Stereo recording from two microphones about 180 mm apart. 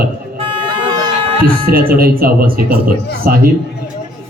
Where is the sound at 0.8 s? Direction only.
25° right (ahead or behind).